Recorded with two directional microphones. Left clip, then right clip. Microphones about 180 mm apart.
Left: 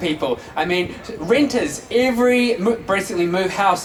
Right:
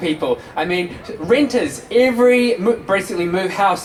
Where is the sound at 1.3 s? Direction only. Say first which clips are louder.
Right 2 dB; 20° left (ahead or behind).